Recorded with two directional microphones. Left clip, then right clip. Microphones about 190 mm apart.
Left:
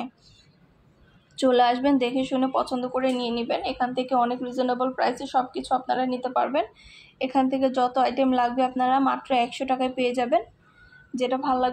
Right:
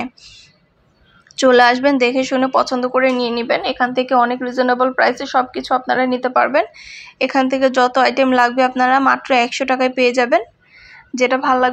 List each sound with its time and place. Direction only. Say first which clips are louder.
1.4 s a woman's voice: right 9 dB; 15° right (ahead or behind)
2.8 s speech: right 10 dB; 50° right (ahead or behind)
3.2 s a woman's voice: right 9 dB; 20° right (ahead or behind)
11.4 s speech: right 8 dB; 45° right (ahead or behind)